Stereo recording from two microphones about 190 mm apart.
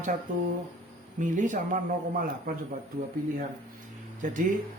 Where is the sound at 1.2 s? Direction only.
40° right (ahead or behind).